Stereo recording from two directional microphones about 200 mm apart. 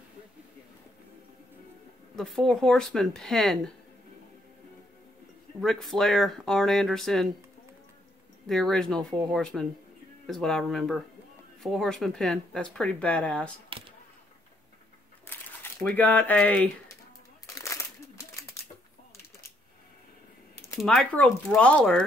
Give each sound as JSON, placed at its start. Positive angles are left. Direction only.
{"t": 2.1, "sound": "speech", "side_deg": 5}
{"t": 5.6, "sound": "speech", "side_deg": 0}
{"t": 8.5, "sound": "speech", "side_deg": 0}
{"t": 13.7, "sound": "a sound", "side_deg": -25}
{"t": 15.2, "sound": "a sound", "side_deg": 10}
{"t": 17.6, "sound": "crumpling", "side_deg": 15}
{"t": 20.8, "sound": "speech", "side_deg": 5}